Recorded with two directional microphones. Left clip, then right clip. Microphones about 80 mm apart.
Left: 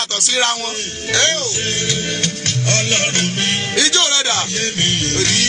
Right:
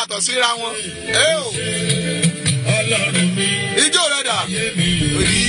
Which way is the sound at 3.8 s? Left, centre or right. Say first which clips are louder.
Left 2 dB; right.